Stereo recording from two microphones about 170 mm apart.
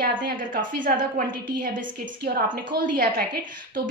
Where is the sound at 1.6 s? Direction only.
60° right (ahead or behind).